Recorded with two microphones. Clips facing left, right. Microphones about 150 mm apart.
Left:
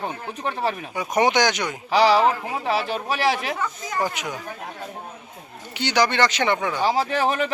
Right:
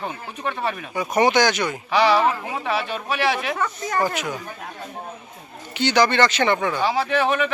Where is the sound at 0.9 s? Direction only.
15° left (ahead or behind).